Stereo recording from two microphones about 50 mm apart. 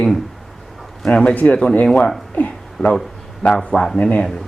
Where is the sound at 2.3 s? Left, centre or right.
Left.